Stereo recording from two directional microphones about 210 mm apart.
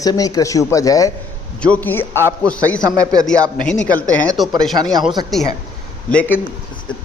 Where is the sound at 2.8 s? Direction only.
15° right (ahead or behind).